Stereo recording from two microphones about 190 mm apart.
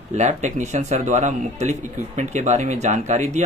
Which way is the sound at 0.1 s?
40° right (ahead or behind).